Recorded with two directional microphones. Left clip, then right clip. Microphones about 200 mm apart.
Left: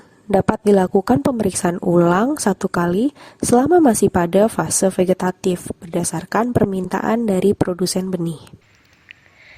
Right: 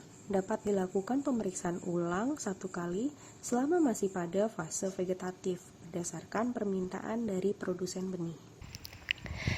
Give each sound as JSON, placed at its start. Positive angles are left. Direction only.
{"t": 0.3, "sound": "a woman's voice", "side_deg": 55}
{"t": 9.0, "sound": "sniff", "side_deg": -40}